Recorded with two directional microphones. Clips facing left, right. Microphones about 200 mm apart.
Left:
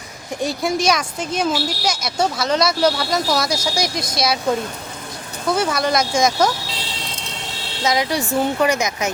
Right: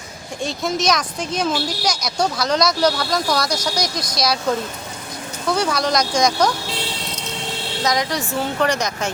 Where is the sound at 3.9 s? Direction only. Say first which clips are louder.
Left 2 dB; 25° left (ahead or behind).